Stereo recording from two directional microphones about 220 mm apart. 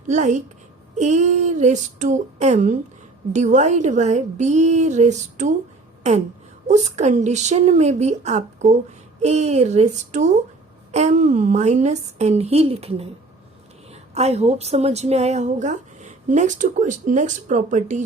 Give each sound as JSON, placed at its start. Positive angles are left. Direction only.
{"t": 0.1, "sound": "a woman's voice", "side_deg": -35}
{"t": 6.0, "sound": "a sound", "side_deg": -30}
{"t": 6.7, "sound": "a woman's voice", "side_deg": -30}